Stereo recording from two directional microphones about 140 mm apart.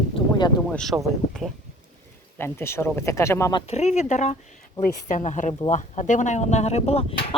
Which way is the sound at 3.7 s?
50° left (ahead or behind).